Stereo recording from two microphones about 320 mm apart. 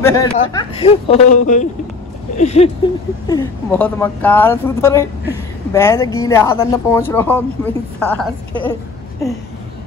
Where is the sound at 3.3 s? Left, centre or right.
Centre.